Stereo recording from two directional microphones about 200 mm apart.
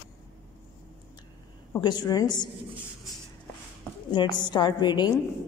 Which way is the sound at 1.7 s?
20° left (ahead or behind).